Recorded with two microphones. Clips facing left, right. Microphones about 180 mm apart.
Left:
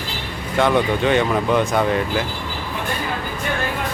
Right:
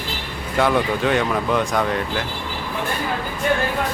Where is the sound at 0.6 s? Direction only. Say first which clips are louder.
Left 1 dB; centre (ahead or behind).